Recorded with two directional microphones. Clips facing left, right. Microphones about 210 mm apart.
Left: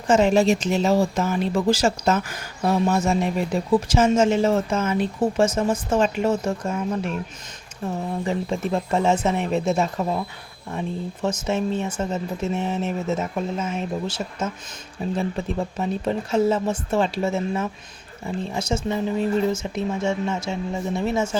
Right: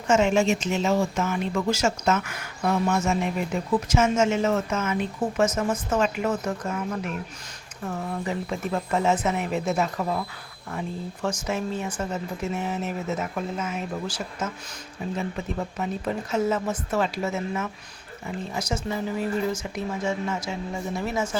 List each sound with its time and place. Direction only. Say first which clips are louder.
0.1 s speech: left 3 dB; 35° left (ahead or behind)